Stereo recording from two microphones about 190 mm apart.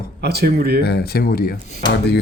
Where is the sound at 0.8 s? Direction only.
55° left (ahead or behind).